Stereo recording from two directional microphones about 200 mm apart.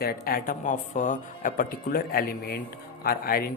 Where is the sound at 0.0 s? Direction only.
45° left (ahead or behind).